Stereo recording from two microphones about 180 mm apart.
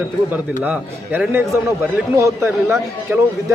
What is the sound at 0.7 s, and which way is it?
A man's voice, 10° right (ahead or behind).